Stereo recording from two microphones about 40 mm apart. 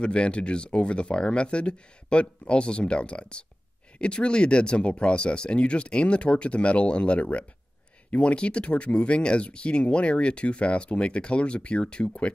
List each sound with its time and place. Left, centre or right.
0.0 s speech: left